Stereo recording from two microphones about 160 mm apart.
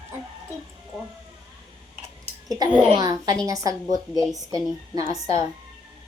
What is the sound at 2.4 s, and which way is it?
A child's voice, 25° right (ahead or behind).